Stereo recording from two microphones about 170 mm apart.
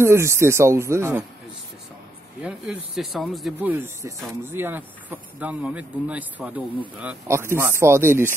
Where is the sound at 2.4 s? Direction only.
5° right (ahead or behind).